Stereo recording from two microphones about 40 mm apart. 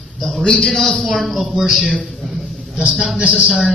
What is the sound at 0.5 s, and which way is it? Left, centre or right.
Speech, centre.